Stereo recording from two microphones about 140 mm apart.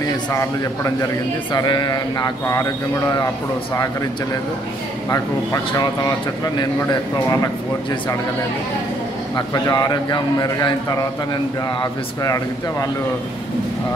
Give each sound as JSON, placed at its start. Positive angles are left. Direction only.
{"t": 0.0, "sound": "speech", "side_deg": 25}
{"t": 9.3, "sound": "speech", "side_deg": 25}